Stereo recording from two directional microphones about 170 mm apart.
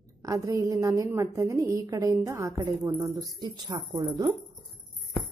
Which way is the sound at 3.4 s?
25° right (ahead or behind).